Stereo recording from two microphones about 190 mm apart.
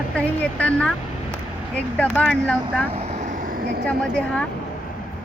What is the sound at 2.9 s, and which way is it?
Vehicle, 35° right (ahead or behind).